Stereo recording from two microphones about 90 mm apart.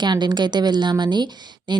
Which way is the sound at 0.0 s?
55° right (ahead or behind).